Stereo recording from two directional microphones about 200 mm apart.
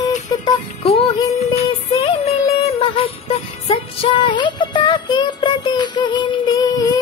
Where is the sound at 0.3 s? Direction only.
25° left (ahead or behind).